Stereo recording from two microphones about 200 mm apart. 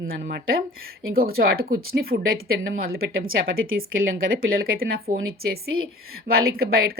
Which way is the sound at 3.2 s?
85° right.